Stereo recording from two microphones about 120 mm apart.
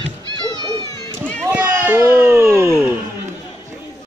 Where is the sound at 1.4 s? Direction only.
15° right (ahead or behind).